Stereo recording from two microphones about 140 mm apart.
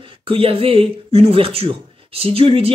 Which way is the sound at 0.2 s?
40° right (ahead or behind).